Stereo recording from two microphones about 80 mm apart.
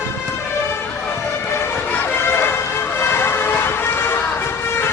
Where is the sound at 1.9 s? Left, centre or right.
Left.